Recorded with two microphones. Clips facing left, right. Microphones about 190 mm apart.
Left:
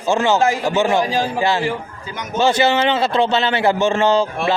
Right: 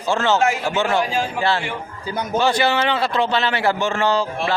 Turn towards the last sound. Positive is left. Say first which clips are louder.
# left 4 dB
turn(degrees=20)  # may be behind; listen again after turning